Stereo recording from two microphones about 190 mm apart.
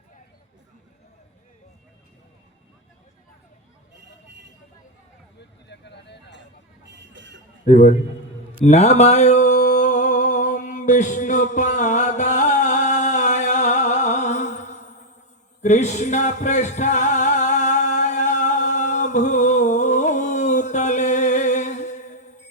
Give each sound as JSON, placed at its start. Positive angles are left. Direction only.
{"t": 5.4, "sound": "vehicle", "side_deg": 65}
{"t": 6.9, "sound": "a sound", "side_deg": -70}
{"t": 7.6, "sound": "a man's voice", "side_deg": 35}
{"t": 8.6, "sound": "mantra", "side_deg": 35}
{"t": 15.6, "sound": "music", "side_deg": 40}